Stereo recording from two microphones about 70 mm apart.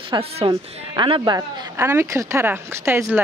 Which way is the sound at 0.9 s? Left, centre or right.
Right.